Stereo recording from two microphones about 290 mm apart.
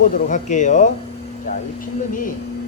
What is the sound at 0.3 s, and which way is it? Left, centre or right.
Speech, left.